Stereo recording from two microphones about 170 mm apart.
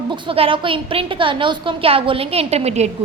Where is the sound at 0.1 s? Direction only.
30° right (ahead or behind).